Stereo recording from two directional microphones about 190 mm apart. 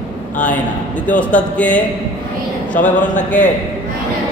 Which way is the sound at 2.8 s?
40° left (ahead or behind).